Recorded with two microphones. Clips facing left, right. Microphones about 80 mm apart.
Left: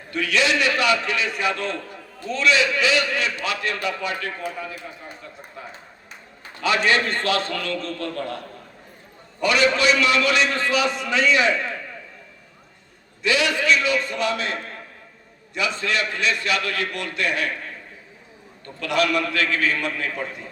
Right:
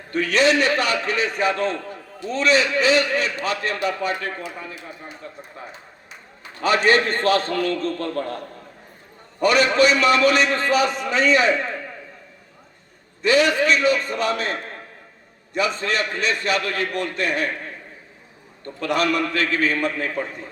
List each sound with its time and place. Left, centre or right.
0.1 s a man's voice: right
6.6 s a man's voice: right
13.2 s a man's voice: right
18.6 s a man's voice: right